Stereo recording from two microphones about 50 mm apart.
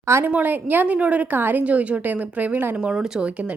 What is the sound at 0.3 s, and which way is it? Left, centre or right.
Speech, right.